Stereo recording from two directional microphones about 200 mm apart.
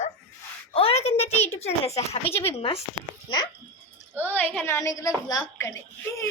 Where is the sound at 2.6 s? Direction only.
25° left (ahead or behind).